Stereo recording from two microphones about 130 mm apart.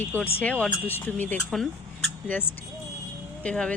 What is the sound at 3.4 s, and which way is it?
Speech, 10° left (ahead or behind).